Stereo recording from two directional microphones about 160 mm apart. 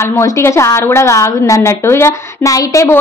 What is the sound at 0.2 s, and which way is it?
A woman's voice, 15° left (ahead or behind).